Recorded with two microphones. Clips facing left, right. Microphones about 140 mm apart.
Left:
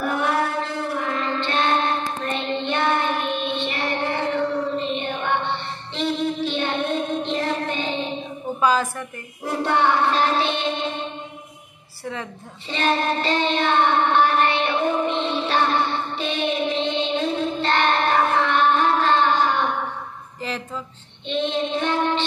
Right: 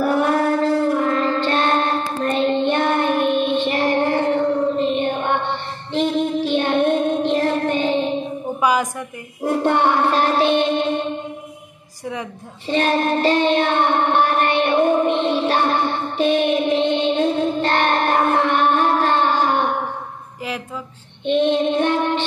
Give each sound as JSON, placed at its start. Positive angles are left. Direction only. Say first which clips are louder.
{"t": 0.0, "sound": "music", "louder": "right 5 dB", "side_deg": -40}
{"t": 8.5, "sound": "a sound", "louder": "right 1 dB", "side_deg": -15}
{"t": 9.4, "sound": "music", "louder": "right 4 dB", "side_deg": -50}
{"t": 12.6, "sound": "child singing", "louder": "right 4 dB", "side_deg": -45}
{"t": 21.3, "sound": "child singing", "louder": "right 7 dB", "side_deg": -50}